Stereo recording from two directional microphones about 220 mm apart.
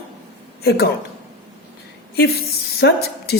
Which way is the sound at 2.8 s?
45° left (ahead or behind).